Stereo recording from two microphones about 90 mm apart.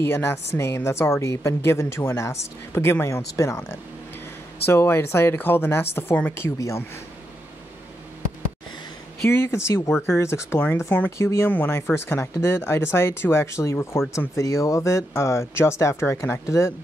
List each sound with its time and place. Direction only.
0.0 s a woman's voice: 25° left (ahead or behind)
4.6 s a woman's voice: 25° left (ahead or behind)
9.3 s a woman's voice: 30° left (ahead or behind)